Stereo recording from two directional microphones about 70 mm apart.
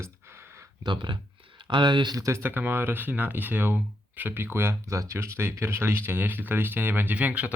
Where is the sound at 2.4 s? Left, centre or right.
Right.